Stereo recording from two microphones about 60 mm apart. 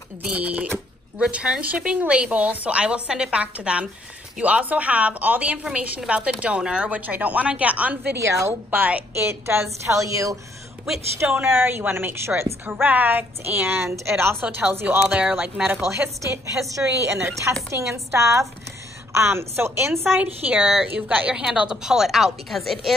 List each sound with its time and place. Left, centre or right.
0.2 s a woman's voice: right
8.2 s chopping: right
8.6 s a woman's voice: right
9.1 s a woman's voice: right
11.4 s a woman's voice: right
15.0 s a woman's voice: centre
15.3 s a woman's voice: right
15.8 s a woman's voice: right
16.7 s chopping: right
17.6 s a woman's voice: right
20.2 s a woman's voice: right; by 22.9 s centre